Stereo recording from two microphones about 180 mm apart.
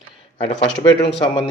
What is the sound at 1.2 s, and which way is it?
Speech, 25° left (ahead or behind).